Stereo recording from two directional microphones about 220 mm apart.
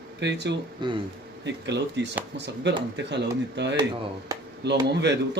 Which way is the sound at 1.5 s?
50° right (ahead or behind).